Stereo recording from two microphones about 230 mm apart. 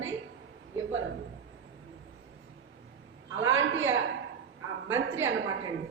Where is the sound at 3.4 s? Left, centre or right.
Right.